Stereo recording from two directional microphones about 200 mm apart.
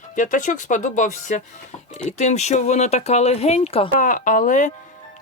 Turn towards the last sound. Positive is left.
turn(degrees=40)  # may be behind; listen again after turning